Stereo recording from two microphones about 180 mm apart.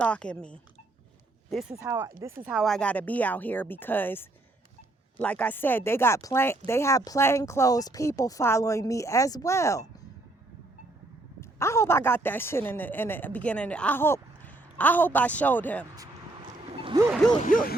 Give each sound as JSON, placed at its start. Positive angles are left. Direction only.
{"t": 0.0, "sound": "speech", "side_deg": 5}
{"t": 1.9, "sound": "speech", "side_deg": -15}
{"t": 2.5, "sound": "speech", "side_deg": 0}
{"t": 11.3, "sound": "speech", "side_deg": 15}
{"t": 16.7, "sound": "a sound", "side_deg": -30}
{"t": 17.4, "sound": "a sound", "side_deg": 50}